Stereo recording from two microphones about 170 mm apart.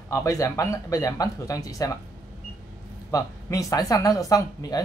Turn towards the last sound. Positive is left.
turn(degrees=20)  # may be behind; listen again after turning